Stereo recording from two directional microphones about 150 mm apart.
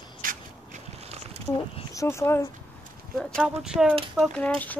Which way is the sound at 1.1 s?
45° right (ahead or behind).